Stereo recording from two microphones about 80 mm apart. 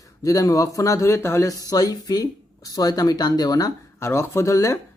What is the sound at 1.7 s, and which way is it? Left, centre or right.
Speech, left.